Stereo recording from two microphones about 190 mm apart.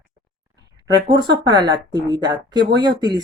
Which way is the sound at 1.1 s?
25° right (ahead or behind).